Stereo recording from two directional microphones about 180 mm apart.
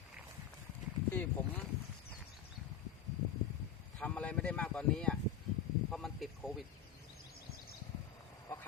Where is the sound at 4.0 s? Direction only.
5° left (ahead or behind).